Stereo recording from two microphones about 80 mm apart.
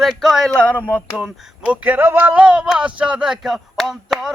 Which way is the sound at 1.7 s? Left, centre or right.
Right.